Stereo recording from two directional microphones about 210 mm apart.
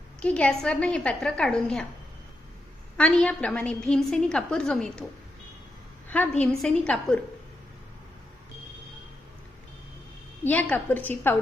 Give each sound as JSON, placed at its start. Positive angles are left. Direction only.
{"t": 0.2, "sound": "a woman's voice", "side_deg": 5}
{"t": 3.0, "sound": "a woman's voice", "side_deg": 5}
{"t": 6.1, "sound": "a woman's voice", "side_deg": 5}
{"t": 10.4, "sound": "a woman's voice", "side_deg": 5}